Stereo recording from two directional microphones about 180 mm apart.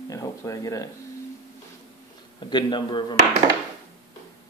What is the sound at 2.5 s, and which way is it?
Speech, 25° left (ahead or behind).